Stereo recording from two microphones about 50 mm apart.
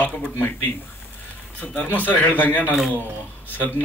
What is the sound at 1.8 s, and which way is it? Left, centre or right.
A man's voice, left.